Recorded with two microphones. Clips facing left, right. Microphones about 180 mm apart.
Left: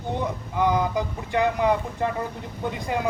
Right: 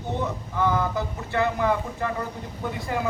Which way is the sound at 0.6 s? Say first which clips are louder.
Left 2 dB; 15° left (ahead or behind).